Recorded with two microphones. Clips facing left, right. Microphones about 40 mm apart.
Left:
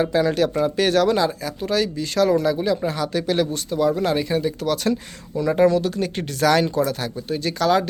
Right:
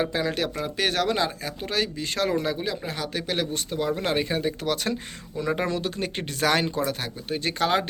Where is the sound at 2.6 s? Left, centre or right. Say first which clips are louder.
Left 8 dB; centre.